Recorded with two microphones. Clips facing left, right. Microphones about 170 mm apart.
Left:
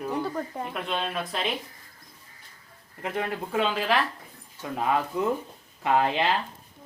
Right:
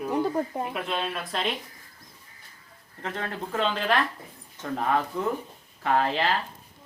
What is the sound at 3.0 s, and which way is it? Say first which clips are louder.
Speech: left 3 dB; 10° left (ahead or behind).